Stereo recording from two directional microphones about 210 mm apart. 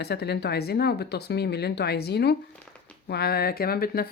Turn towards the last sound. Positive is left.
turn(degrees=45)  # may be behind; listen again after turning